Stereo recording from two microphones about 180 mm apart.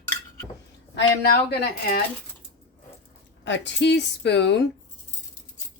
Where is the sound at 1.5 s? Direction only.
65° left (ahead or behind).